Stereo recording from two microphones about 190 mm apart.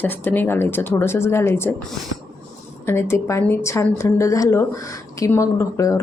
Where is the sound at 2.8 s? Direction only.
15° left (ahead or behind).